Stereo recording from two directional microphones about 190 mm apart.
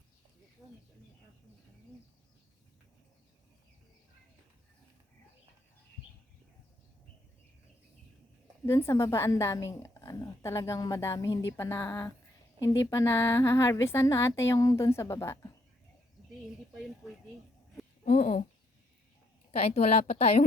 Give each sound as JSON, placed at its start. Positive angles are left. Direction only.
{"t": 0.6, "sound": "a sound", "side_deg": 0}
{"t": 8.6, "sound": "a woman's voice", "side_deg": 15}
{"t": 18.0, "sound": "speech", "side_deg": 40}
{"t": 19.5, "sound": "a woman's voice", "side_deg": 35}